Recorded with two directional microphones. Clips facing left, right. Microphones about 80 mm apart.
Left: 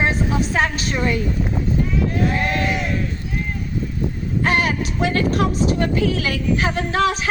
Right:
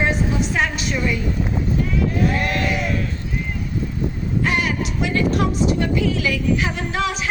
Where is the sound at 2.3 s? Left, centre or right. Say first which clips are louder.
Left 1 dB; left.